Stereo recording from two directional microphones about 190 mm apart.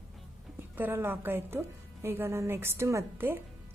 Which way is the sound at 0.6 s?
10° right (ahead or behind).